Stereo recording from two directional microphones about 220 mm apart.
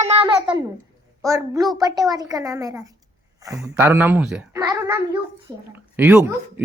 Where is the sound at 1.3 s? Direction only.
15° right (ahead or behind).